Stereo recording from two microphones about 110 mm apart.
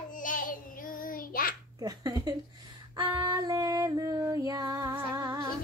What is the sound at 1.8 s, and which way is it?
Female singing, 35° right (ahead or behind).